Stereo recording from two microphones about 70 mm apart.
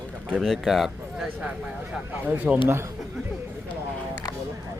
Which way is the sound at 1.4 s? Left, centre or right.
Centre.